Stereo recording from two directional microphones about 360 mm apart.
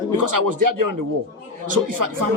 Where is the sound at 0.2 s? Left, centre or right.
Right.